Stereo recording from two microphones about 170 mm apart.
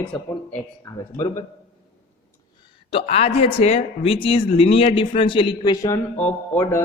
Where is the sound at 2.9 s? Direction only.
35° left (ahead or behind).